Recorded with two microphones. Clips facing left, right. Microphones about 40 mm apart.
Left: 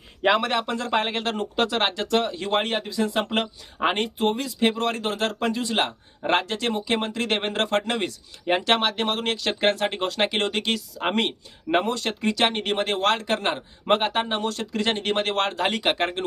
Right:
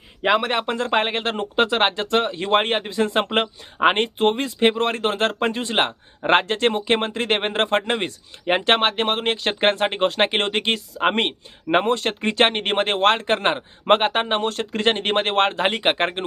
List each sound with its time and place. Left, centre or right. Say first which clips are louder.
0.2 s speech: right 1 dB; centre
0.4 s a man's voice: right 3 dB; right
3.2 s a man's voice: right 4 dB; right